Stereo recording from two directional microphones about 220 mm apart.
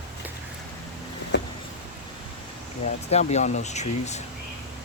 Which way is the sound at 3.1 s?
30° left (ahead or behind).